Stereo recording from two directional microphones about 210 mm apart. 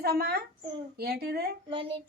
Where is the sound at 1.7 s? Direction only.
25° right (ahead or behind).